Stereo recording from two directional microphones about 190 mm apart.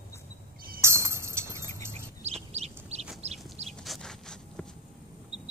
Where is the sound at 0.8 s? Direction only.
15° right (ahead or behind).